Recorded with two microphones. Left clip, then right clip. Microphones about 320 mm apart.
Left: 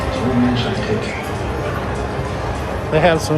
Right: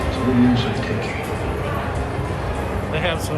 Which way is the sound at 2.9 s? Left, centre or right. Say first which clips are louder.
Left 10 dB; centre.